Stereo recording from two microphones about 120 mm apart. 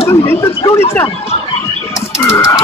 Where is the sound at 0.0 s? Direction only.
25° left (ahead or behind).